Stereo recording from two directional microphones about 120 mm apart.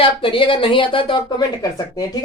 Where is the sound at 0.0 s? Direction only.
45° left (ahead or behind).